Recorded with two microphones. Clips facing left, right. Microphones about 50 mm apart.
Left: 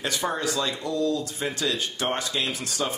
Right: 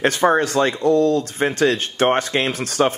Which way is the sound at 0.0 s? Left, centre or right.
Right.